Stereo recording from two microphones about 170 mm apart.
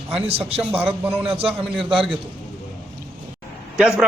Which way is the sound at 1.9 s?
Centre (ahead or behind).